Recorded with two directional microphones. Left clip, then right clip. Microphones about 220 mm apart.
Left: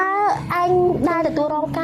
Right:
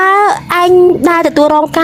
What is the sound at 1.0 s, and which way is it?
Speech, 45° right (ahead or behind).